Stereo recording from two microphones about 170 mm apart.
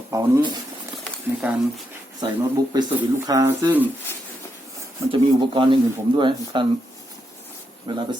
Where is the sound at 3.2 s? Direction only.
20° right (ahead or behind).